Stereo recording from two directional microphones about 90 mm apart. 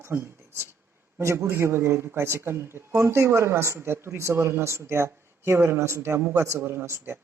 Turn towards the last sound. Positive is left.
turn(degrees=-30)  # may be behind; listen again after turning